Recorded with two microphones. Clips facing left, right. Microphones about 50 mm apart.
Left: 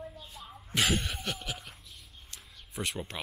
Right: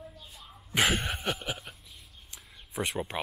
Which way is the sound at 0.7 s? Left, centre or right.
Centre.